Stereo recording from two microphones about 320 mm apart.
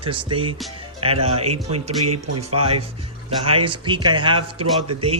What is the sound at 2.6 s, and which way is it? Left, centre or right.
Speech, centre.